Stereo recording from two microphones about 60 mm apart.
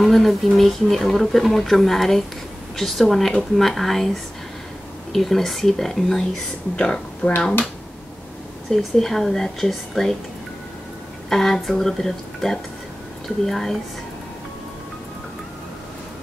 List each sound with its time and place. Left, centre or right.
0.0 s speech: centre
8.6 s speech: centre
11.2 s speech: centre